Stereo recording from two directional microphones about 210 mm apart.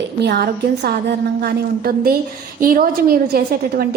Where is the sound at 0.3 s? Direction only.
50° right (ahead or behind).